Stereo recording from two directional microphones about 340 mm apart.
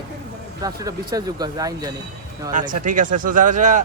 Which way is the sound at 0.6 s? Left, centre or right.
Centre.